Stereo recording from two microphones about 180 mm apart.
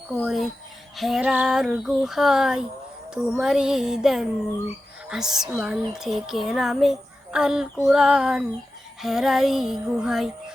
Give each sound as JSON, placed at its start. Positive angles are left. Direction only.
{"t": 0.1, "sound": "a woman's voice", "side_deg": 0}